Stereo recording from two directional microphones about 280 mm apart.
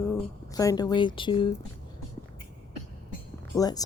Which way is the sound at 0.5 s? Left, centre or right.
Centre.